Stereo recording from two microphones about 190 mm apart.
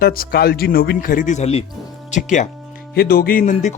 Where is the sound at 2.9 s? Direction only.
55° left (ahead or behind); by 3.8 s 40° left (ahead or behind).